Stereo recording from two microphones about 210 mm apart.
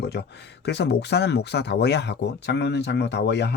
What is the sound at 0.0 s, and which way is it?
Speech, 50° left (ahead or behind).